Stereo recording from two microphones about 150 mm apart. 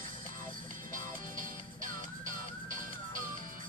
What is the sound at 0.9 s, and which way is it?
Music, 60° right (ahead or behind).